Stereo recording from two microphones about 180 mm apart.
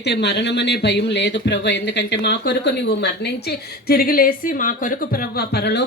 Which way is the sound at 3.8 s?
55° left (ahead or behind).